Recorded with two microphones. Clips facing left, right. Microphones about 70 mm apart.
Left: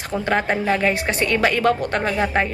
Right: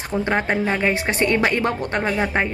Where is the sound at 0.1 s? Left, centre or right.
Right.